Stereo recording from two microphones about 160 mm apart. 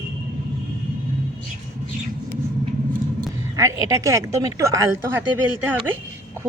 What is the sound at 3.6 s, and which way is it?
Speech, 20° right (ahead or behind).